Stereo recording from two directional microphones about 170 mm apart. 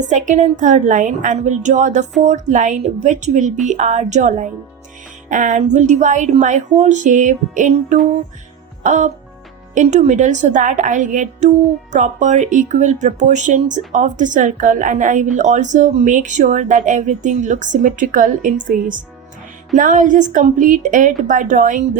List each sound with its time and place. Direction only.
0.1 s a woman's voice: 45° right (ahead or behind)